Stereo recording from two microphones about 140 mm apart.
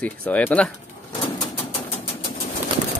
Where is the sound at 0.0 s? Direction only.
10° left (ahead or behind).